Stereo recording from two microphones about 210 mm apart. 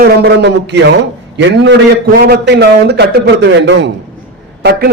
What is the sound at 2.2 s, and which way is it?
A man's voice, 50° right (ahead or behind).